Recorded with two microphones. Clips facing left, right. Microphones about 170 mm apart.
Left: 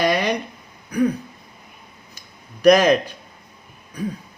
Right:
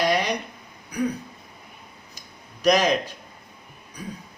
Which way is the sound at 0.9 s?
55° left (ahead or behind).